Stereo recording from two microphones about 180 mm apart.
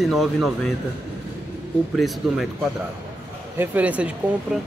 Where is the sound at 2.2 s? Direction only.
Centre (ahead or behind).